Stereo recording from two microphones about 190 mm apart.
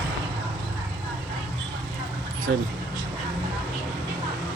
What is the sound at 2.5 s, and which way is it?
Speech, 80° right.